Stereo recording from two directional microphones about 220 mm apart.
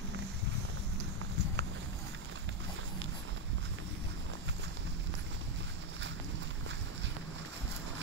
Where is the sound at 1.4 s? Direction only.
50° right (ahead or behind).